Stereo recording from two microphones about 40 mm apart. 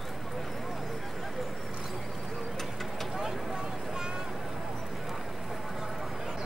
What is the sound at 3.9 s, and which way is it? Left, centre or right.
Boat, centre.